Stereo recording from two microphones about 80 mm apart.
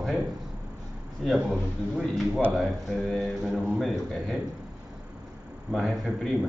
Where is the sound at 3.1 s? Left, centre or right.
Centre.